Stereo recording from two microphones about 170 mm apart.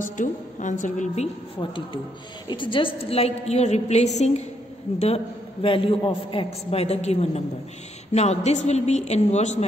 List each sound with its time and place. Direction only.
0.0 s a woman's voice: 50° left (ahead or behind)